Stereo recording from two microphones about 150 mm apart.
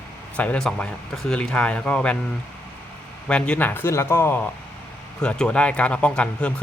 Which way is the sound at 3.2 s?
5° left (ahead or behind).